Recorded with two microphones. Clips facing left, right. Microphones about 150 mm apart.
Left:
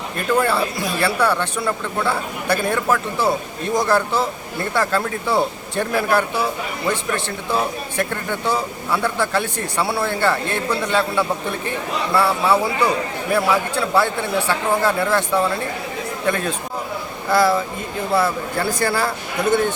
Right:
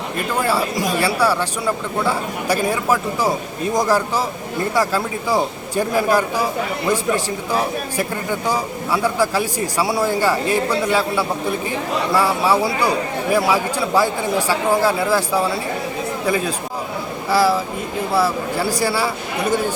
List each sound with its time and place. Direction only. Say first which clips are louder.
0.9 s a man's voice: even; 10° right (ahead or behind)
7.9 s a man's voice: left 2 dB; 10° right (ahead or behind)